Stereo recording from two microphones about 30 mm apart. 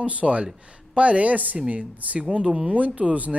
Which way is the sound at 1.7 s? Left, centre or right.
Right.